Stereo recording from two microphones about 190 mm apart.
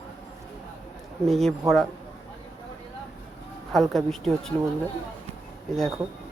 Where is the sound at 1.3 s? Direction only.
Centre (ahead or behind).